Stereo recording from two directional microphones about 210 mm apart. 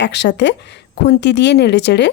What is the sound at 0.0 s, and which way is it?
Speech, 55° left (ahead or behind).